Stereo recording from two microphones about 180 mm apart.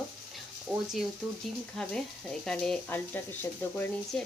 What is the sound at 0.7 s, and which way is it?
Speech, 5° right (ahead or behind).